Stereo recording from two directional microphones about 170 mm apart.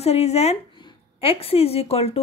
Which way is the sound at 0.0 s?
40° left (ahead or behind).